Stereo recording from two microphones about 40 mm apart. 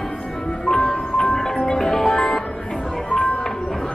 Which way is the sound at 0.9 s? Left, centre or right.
Centre.